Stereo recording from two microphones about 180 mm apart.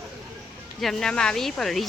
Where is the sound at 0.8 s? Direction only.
Centre (ahead or behind).